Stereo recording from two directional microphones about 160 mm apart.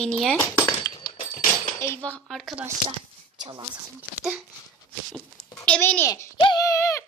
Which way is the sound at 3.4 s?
30° right (ahead or behind).